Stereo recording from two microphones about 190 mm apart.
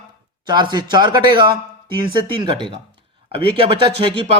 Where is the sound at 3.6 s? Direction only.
25° right (ahead or behind).